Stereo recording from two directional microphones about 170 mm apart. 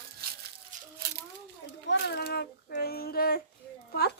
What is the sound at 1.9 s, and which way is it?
Child singing, 80° left.